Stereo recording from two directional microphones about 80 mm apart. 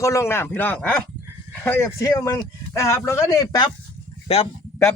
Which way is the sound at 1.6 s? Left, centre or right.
Left.